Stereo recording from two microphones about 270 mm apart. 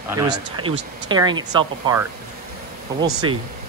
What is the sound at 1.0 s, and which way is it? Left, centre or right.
Speech, centre.